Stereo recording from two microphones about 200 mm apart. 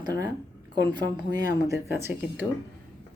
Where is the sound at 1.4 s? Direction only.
15° right (ahead or behind).